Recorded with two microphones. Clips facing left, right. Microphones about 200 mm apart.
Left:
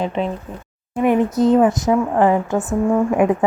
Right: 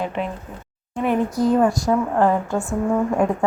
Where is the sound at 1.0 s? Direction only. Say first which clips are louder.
Left 4 dB; 20° left (ahead or behind).